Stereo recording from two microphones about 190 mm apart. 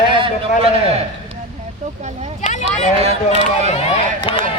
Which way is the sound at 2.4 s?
35° left (ahead or behind).